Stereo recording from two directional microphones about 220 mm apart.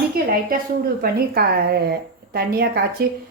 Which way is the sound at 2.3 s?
45° right (ahead or behind).